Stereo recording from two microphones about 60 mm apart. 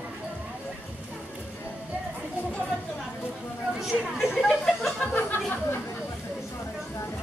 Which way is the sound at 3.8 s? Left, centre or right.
Centre.